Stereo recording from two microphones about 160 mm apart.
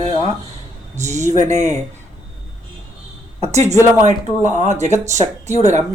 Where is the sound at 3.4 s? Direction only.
45° right (ahead or behind).